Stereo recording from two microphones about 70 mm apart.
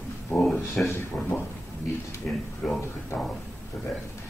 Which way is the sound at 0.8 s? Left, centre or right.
Centre.